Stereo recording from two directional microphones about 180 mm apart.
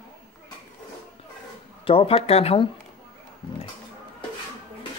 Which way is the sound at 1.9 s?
30° left (ahead or behind).